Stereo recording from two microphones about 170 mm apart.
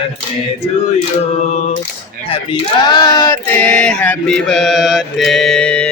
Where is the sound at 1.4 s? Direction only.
40° left (ahead or behind).